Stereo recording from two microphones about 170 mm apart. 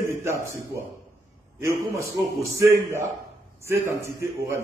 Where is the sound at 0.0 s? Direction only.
15° right (ahead or behind).